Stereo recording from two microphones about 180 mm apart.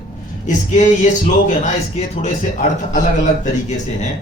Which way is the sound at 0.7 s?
45° left (ahead or behind).